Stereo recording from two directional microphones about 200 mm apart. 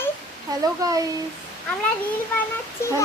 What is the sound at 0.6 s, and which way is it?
Speech, 15° right (ahead or behind).